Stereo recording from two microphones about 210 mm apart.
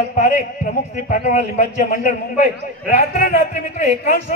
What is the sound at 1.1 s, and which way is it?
A man's voice, 40° left (ahead or behind).